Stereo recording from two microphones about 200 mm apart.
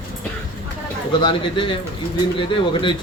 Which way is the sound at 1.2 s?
25° left (ahead or behind).